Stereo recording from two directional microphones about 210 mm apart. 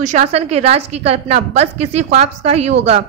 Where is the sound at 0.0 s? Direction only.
35° right (ahead or behind).